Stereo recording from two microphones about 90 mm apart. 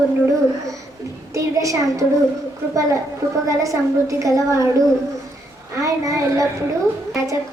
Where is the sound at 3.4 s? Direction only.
35° right (ahead or behind).